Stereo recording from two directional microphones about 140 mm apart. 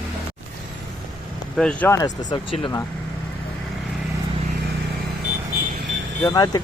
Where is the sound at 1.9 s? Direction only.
25° left (ahead or behind).